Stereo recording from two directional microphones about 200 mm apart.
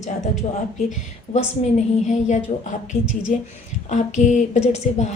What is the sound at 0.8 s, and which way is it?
Speech, 35° left (ahead or behind).